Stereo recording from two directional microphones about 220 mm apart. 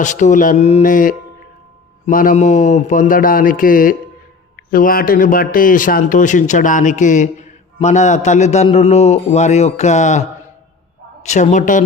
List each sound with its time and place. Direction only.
0.0 s a man's voice: 35° left (ahead or behind)